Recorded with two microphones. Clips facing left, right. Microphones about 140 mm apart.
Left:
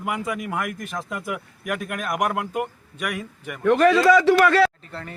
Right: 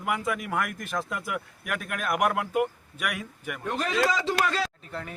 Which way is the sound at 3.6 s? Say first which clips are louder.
Left 11 dB; 80° left.